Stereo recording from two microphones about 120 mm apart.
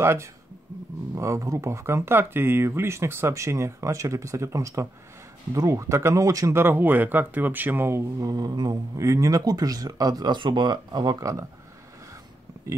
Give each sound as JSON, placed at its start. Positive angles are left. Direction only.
{"t": 0.0, "sound": "speech", "side_deg": -20}